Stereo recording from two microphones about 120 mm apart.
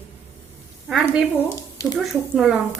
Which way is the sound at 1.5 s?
30° left (ahead or behind).